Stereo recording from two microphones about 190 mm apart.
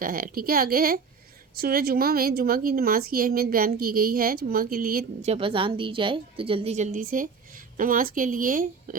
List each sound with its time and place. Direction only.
0.0 s a woman's voice: 45° right (ahead or behind)
5.2 s a woman's voice: 30° right (ahead or behind)